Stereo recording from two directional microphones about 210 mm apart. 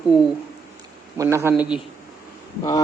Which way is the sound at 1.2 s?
15° right (ahead or behind).